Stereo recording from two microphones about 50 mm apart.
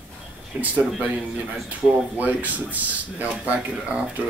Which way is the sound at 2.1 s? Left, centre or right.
Right.